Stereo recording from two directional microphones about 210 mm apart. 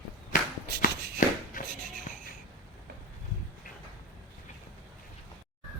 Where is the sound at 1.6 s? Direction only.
40° left (ahead or behind).